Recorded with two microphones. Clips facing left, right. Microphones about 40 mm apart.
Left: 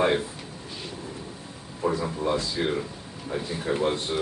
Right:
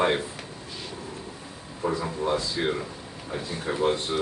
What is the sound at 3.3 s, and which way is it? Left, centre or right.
Speech, centre.